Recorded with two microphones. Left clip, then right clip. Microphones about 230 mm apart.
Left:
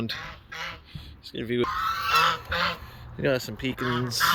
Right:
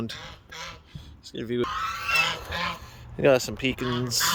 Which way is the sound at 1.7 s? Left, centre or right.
Centre.